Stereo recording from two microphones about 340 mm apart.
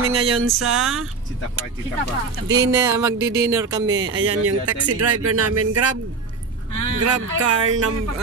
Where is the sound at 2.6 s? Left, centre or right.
Centre.